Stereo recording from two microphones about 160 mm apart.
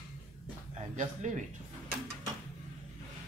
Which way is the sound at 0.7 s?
50° right (ahead or behind).